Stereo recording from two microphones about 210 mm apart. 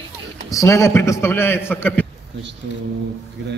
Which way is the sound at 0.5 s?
15° left (ahead or behind).